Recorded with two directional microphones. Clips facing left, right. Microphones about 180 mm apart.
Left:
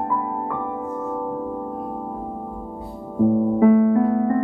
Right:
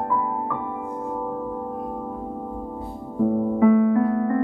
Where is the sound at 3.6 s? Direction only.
25° left (ahead or behind).